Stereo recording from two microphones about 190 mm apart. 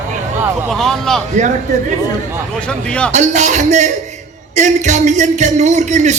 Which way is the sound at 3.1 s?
40° right (ahead or behind).